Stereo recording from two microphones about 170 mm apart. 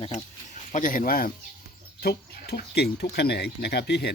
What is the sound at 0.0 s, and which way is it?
Speech, 45° left (ahead or behind).